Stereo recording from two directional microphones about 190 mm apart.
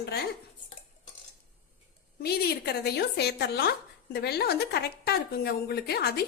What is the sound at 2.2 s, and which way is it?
A woman's voice, 55° left (ahead or behind).